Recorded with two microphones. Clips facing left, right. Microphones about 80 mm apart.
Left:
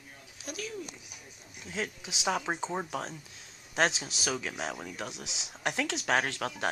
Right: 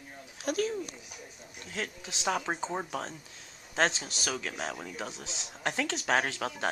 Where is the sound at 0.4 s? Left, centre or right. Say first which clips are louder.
Right 10 dB; right.